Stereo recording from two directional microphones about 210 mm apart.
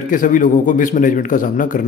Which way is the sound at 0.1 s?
40° left (ahead or behind).